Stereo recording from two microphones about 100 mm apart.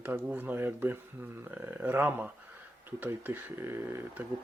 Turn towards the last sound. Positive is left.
turn(degrees=-20)  # may be behind; listen again after turning